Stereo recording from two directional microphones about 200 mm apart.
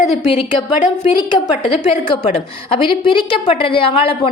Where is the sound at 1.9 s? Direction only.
25° left (ahead or behind).